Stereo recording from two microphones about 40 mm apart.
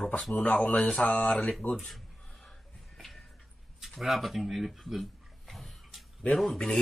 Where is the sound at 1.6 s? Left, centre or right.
Left.